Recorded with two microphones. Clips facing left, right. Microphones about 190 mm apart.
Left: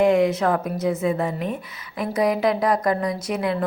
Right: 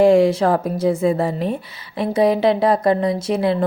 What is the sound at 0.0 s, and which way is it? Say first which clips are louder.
A woman's voice: right 5 dB; 30° right (ahead or behind).